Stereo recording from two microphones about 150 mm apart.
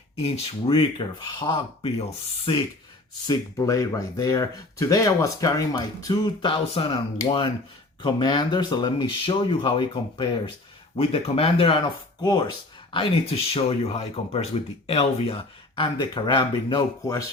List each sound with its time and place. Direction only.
0.2 s speech: 40° left (ahead or behind)
3.2 s speech: 25° left (ahead or behind)
13.5 s speech: 45° left (ahead or behind); by 17.2 s 25° left (ahead or behind)